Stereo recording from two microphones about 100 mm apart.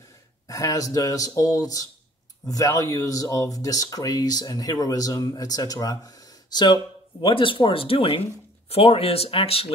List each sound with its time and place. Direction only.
0.5 s speech: 35° left (ahead or behind); by 9.7 s 75° left (ahead or behind)